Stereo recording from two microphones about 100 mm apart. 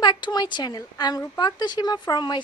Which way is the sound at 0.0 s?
50° left (ahead or behind).